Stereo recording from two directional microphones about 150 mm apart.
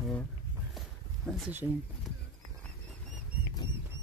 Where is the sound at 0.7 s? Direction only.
Centre (ahead or behind).